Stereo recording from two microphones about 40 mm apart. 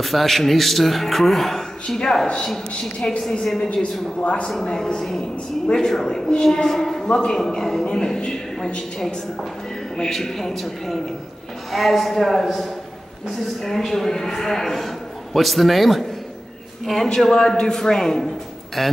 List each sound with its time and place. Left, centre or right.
0.0 s speech: centre
2.0 s a man's voice: centre
9.9 s speech: centre